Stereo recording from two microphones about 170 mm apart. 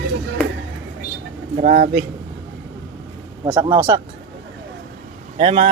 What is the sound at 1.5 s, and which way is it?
Speech, 55° right (ahead or behind).